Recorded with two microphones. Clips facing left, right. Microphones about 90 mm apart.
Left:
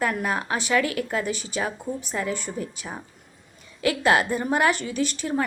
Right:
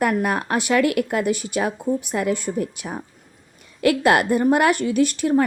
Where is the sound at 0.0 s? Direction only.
60° right (ahead or behind).